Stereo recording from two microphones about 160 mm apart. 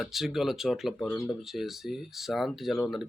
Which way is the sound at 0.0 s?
Centre (ahead or behind).